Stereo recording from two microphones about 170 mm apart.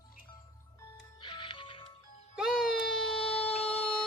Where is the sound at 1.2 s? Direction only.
30° left (ahead or behind).